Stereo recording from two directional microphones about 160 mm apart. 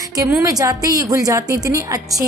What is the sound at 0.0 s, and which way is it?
A woman's voice, 20° right (ahead or behind).